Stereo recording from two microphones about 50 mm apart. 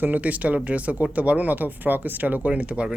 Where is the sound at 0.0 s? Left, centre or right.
Right.